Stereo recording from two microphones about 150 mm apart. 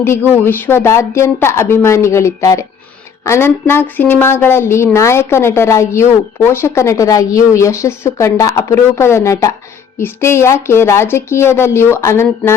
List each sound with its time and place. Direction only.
0.3 s a woman's voice: 15° left (ahead or behind)